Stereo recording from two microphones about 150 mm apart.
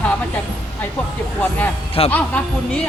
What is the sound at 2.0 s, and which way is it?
Speech, 40° left (ahead or behind).